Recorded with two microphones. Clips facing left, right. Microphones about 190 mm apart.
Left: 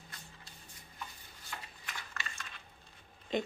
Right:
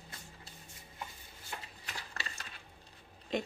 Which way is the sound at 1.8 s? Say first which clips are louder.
Right 1 dB; 35° right (ahead or behind).